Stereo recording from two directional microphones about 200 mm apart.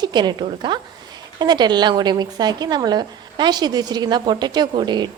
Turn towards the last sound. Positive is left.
turn(degrees=-20)  # may be behind; listen again after turning